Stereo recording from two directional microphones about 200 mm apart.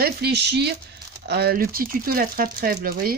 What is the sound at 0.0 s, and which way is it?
Speech, 55° right (ahead or behind).